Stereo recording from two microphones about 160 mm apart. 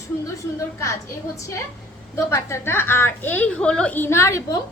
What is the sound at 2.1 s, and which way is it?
A woman's voice, 15° left (ahead or behind).